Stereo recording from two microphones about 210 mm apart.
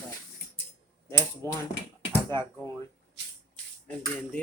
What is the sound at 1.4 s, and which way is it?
Speech, 15° left (ahead or behind).